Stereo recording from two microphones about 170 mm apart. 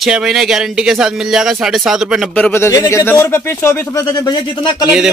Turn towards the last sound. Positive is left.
turn(degrees=-5)  # may be behind; listen again after turning